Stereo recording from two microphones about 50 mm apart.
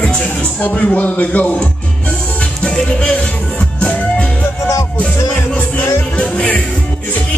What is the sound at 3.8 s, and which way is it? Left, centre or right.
Music, left.